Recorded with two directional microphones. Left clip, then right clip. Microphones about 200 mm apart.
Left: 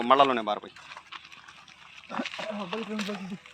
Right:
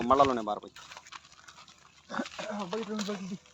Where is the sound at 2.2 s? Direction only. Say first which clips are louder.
Left 4 dB; 10° right (ahead or behind).